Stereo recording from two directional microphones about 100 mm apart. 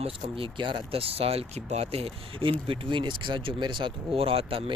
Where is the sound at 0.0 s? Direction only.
65° right (ahead or behind).